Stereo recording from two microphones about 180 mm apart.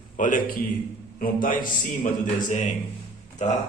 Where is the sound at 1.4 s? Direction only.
50° left (ahead or behind).